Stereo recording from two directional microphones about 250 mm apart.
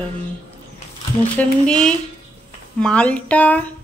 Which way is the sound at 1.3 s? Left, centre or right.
Centre.